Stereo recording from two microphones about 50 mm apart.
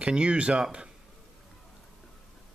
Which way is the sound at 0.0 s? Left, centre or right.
Right.